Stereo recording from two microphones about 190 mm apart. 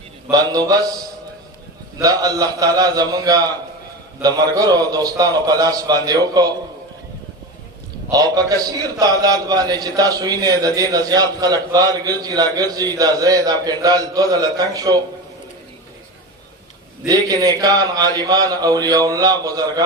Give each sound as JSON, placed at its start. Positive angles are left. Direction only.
{"t": 0.3, "sound": "a man's voice", "side_deg": -20}
{"t": 2.0, "sound": "a man's voice", "side_deg": -20}
{"t": 8.1, "sound": "a man's voice", "side_deg": -20}
{"t": 17.1, "sound": "a man's voice", "side_deg": -20}